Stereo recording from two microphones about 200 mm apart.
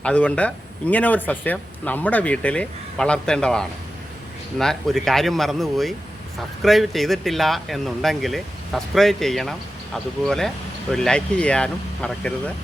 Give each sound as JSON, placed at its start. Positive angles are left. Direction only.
{"t": 0.0, "sound": "speech", "side_deg": 5}